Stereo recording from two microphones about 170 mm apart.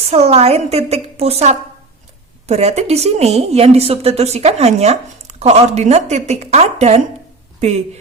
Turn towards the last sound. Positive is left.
turn(degrees=-40)  # may be behind; listen again after turning